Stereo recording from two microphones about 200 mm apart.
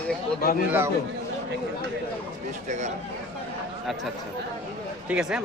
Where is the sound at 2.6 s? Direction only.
35° right (ahead or behind).